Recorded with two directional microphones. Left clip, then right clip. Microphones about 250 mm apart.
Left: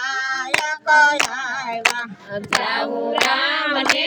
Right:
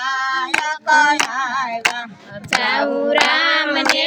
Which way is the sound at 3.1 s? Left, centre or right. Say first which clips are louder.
Right 3 dB; right.